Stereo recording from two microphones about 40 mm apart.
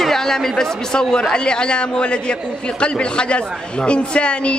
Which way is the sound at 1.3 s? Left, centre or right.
Left.